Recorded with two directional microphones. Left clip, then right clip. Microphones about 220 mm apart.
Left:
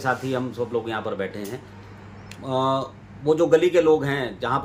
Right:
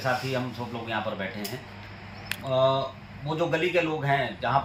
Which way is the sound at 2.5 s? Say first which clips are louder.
Left 1 dB; 25° left (ahead or behind).